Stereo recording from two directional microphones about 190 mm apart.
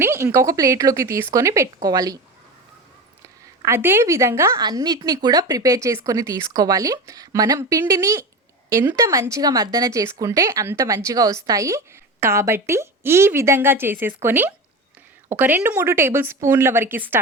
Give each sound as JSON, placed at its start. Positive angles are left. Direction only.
{"t": 0.0, "sound": "a woman's voice", "side_deg": -15}
{"t": 3.6, "sound": "a woman's voice", "side_deg": -15}